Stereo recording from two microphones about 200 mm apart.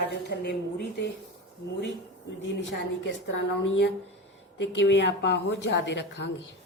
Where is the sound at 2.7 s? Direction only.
65° left (ahead or behind).